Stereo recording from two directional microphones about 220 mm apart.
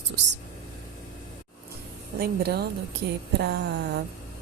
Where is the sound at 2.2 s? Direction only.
45° right (ahead or behind).